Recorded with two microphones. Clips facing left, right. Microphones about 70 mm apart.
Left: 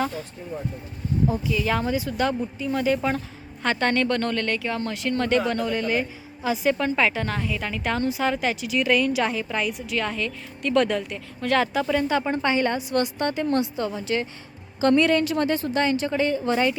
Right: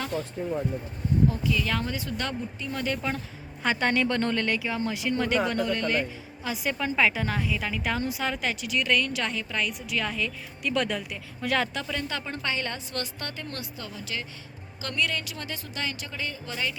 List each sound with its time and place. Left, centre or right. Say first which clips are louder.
1.3 s speech: left 3 dB; centre
3.6 s speech: left 2 dB; centre
9.7 s speech: left 3 dB; centre
11.9 s a woman's voice: left 10 dB; centre; by 16.7 s left